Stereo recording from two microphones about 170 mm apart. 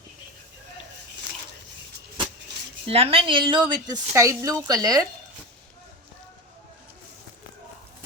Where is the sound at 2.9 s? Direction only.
35° right (ahead or behind).